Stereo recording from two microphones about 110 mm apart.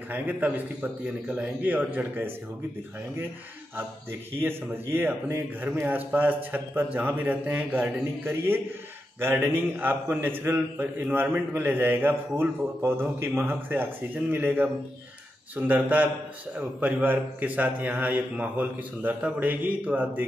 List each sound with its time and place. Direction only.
0.1 s a man's voice: 15° right (ahead or behind)
4.4 s a man's voice: 20° right (ahead or behind)